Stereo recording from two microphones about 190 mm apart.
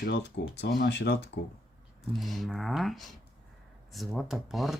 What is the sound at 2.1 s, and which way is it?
Speech, centre (ahead or behind).